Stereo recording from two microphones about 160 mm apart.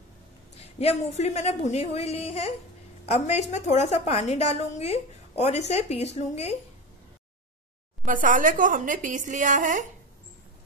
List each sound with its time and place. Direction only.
0.6 s a woman's voice: 40° left (ahead or behind)
8.0 s a woman's voice: 55° right (ahead or behind)